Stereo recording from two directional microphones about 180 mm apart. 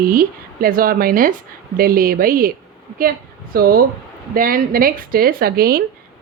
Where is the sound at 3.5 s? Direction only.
55° right (ahead or behind).